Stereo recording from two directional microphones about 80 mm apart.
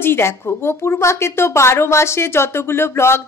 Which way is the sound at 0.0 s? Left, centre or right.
Left.